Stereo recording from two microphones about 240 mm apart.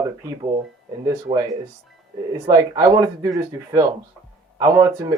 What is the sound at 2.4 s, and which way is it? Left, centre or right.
Speech, centre.